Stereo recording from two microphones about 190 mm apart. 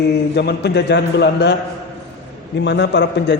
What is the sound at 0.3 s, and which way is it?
A man's voice, 60° left (ahead or behind).